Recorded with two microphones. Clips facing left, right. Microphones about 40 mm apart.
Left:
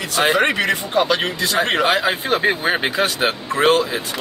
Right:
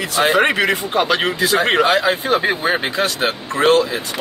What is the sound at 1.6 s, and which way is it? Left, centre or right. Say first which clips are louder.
Speech: right 1 dB; centre.